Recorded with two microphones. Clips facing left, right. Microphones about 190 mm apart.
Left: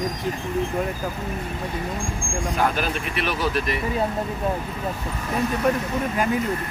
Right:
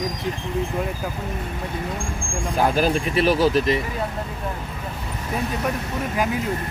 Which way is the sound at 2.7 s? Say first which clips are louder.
Right 6 dB; 35° right (ahead or behind).